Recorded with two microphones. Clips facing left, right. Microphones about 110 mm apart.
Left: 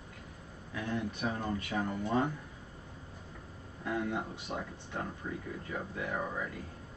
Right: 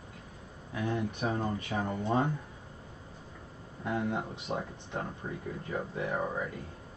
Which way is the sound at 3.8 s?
25° right (ahead or behind).